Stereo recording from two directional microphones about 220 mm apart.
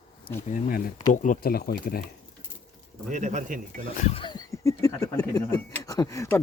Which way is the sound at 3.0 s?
35° right (ahead or behind).